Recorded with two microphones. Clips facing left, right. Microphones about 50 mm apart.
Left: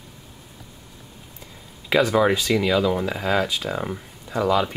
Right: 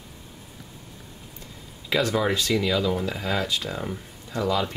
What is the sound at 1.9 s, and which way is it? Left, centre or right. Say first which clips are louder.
Speech: left 5 dB; centre.